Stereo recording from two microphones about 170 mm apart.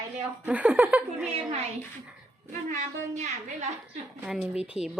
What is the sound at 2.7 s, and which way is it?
A woman's voice, 45° right (ahead or behind).